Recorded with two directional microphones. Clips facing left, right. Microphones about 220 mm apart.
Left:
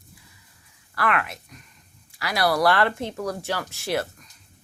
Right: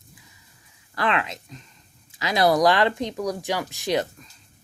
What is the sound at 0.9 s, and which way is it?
Speech, 20° right (ahead or behind).